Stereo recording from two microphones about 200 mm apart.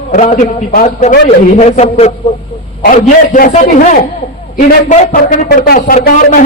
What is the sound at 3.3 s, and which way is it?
A man's voice, 40° left (ahead or behind).